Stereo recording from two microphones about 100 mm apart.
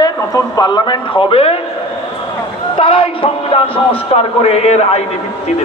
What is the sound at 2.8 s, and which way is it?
Speech, 60° left (ahead or behind).